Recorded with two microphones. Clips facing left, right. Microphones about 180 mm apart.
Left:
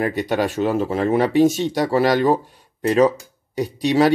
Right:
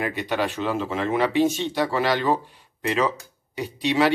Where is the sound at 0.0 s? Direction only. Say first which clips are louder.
Left 5 dB; 40° left (ahead or behind).